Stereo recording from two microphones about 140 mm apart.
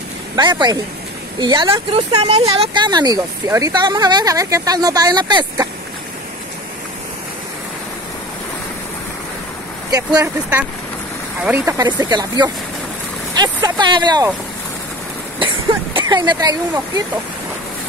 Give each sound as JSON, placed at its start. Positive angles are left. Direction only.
{"t": 0.4, "sound": "speech", "side_deg": -30}
{"t": 2.1, "sound": "speech", "side_deg": -50}
{"t": 2.7, "sound": "speech", "side_deg": -30}
{"t": 9.8, "sound": "speech", "side_deg": -25}
{"t": 10.2, "sound": "speech", "side_deg": -10}
{"t": 11.8, "sound": "speech", "side_deg": -30}
{"t": 15.3, "sound": "speech", "side_deg": -35}